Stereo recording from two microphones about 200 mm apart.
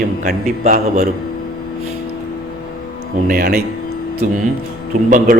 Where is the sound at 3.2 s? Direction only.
50° right (ahead or behind).